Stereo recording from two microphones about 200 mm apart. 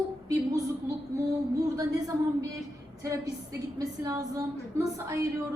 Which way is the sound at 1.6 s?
15° right (ahead or behind).